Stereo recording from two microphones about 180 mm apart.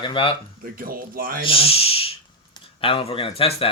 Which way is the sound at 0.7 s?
50° right (ahead or behind).